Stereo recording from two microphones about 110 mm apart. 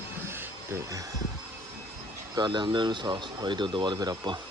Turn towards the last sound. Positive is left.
turn(degrees=-40)  # may be behind; listen again after turning